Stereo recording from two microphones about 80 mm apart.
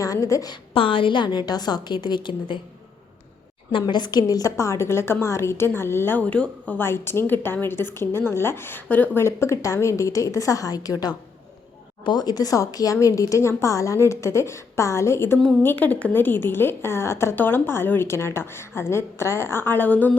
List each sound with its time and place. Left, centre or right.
0.0 s a woman's voice: left
0.5 s a woman's voice: left
3.7 s a woman's voice: left
4.5 s a woman's voice: left
6.2 s speech: centre
6.8 s a woman's voice: left
9.2 s a woman's voice: left
12.0 s a woman's voice: left
15.6 s a woman's voice: left